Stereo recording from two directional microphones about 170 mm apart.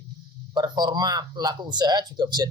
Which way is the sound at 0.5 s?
20° right (ahead or behind).